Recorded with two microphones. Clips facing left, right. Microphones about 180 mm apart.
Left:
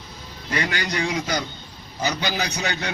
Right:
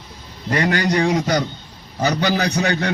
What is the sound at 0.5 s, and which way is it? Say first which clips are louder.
A man's voice: right 8 dB; 40° right (ahead or behind).